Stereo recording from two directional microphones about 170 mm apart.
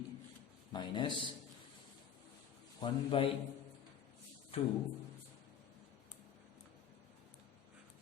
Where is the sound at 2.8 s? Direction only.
30° left (ahead or behind).